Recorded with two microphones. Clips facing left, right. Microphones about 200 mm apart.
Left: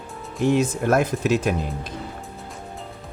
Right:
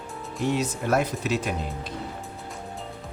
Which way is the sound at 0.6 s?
50° left (ahead or behind).